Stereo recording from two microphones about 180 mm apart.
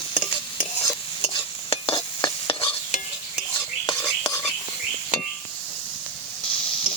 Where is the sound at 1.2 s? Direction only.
30° left (ahead or behind).